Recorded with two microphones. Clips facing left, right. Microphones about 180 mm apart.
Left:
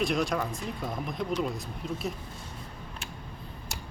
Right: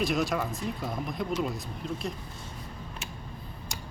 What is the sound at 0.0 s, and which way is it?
Speech, centre (ahead or behind).